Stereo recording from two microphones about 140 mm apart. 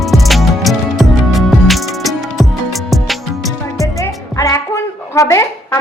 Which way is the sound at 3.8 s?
25° left (ahead or behind).